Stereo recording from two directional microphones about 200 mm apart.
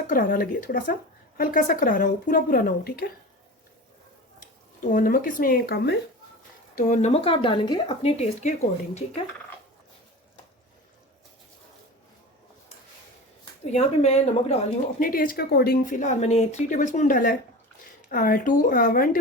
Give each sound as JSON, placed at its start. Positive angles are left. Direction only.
{"t": 0.1, "sound": "speech", "side_deg": 45}
{"t": 4.4, "sound": "speech", "side_deg": 40}
{"t": 6.7, "sound": "speech", "side_deg": 40}
{"t": 13.7, "sound": "speech", "side_deg": 30}